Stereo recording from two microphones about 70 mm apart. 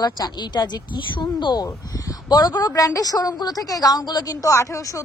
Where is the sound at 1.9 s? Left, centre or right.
Left.